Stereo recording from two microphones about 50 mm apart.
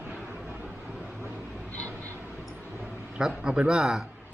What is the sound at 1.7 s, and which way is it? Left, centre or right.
Vehicle, left.